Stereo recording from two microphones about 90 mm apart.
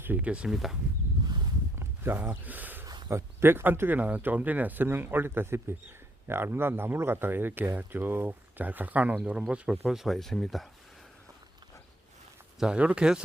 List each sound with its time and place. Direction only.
0.0 s speech: 20° right (ahead or behind)
2.0 s speech: 25° right (ahead or behind); by 10.7 s centre (ahead or behind)
12.5 s speech: 10° right (ahead or behind)